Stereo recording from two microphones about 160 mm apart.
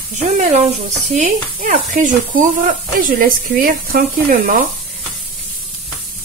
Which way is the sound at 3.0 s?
65° right (ahead or behind).